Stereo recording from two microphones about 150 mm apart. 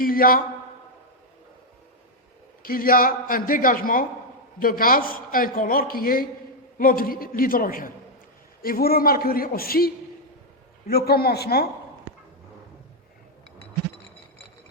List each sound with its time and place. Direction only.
0.0 s a man's voice: 75° left (ahead or behind)
2.6 s a man's voice: 75° left (ahead or behind)
8.6 s a man's voice: 85° left